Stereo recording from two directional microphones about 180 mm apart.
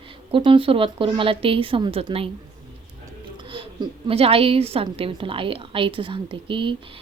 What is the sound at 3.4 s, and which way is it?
A woman's voice, 25° right (ahead or behind).